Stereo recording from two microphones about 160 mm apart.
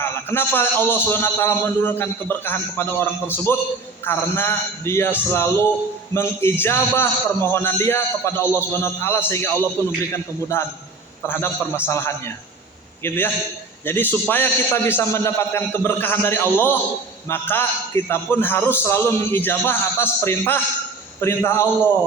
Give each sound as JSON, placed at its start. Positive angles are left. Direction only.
{"t": 0.0, "sound": "a man's voice", "side_deg": 15}